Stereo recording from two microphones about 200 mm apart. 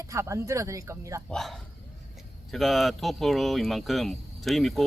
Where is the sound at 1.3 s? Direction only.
Centre (ahead or behind).